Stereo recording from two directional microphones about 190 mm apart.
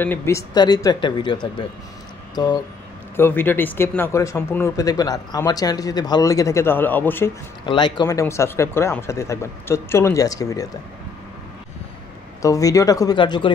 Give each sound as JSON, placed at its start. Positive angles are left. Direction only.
{"t": 0.0, "sound": "speech", "side_deg": 10}
{"t": 3.2, "sound": "speech", "side_deg": 10}
{"t": 7.6, "sound": "speech", "side_deg": 25}
{"t": 12.4, "sound": "speech", "side_deg": 15}